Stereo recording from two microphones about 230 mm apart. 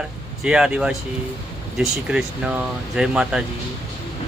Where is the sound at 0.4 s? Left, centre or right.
Centre.